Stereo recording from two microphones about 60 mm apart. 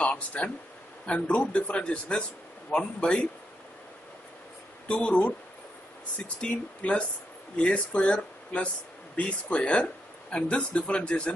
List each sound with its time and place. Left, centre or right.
0.0 s a sound: left
1.0 s a man's voice: centre
4.8 s a man's voice: centre
6.5 s a man's voice: left